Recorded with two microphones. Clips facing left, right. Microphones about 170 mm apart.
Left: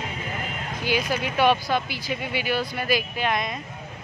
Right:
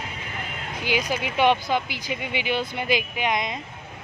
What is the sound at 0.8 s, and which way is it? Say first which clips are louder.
Speech: left 1 dB; 15° right (ahead or behind).